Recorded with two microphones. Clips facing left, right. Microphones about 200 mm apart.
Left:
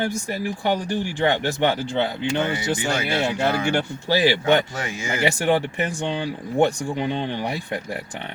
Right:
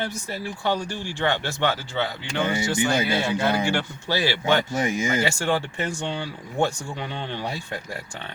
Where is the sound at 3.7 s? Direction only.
15° left (ahead or behind).